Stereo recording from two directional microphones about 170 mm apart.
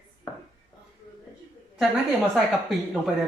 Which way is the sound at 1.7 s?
Centre (ahead or behind).